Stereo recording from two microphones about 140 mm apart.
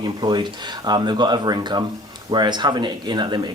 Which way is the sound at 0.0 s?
30° right (ahead or behind).